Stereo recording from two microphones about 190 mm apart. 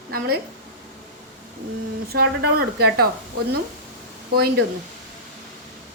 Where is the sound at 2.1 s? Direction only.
55° right (ahead or behind).